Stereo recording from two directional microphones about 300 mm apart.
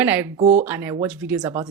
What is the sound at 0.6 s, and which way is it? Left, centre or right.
Speech, centre.